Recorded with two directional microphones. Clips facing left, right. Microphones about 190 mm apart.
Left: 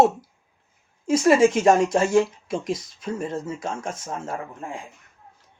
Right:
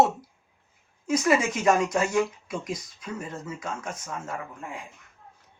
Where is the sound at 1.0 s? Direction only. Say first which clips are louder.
Left 7 dB; 30° left (ahead or behind).